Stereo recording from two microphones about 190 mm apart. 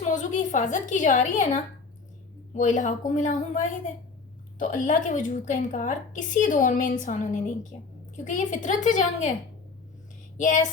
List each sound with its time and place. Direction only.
0.0 s a woman's voice: 40° left (ahead or behind)
2.6 s a woman's voice: 40° left (ahead or behind)
10.3 s speech: 40° left (ahead or behind)